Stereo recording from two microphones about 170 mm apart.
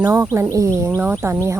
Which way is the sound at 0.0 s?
15° right (ahead or behind).